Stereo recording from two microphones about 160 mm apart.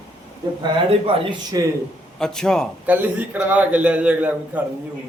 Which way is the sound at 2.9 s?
10° right (ahead or behind).